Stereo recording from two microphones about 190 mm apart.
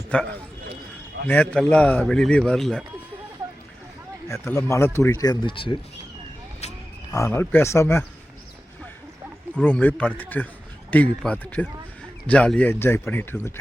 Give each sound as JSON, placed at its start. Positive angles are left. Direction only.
{"t": 0.1, "sound": "speech", "side_deg": 5}
{"t": 1.3, "sound": "a man's voice", "side_deg": 5}
{"t": 4.3, "sound": "speech", "side_deg": 15}
{"t": 7.1, "sound": "speech", "side_deg": 15}
{"t": 9.6, "sound": "speech", "side_deg": 5}